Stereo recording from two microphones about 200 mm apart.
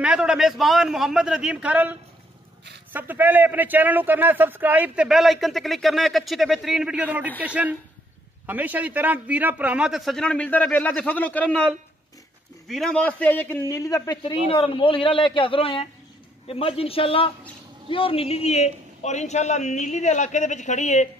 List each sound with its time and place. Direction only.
0.0 s a man's voice: 5° right (ahead or behind); by 21.1 s 35° left (ahead or behind)